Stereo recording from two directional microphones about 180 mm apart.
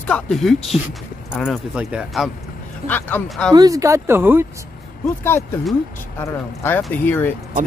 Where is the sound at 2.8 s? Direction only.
35° right (ahead or behind).